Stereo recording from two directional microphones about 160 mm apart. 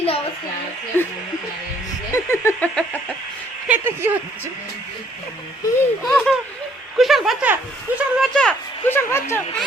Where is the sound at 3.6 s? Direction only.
10° right (ahead or behind).